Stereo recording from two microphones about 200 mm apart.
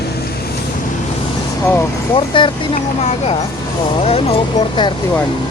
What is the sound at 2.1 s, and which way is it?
Speech, 25° left (ahead or behind).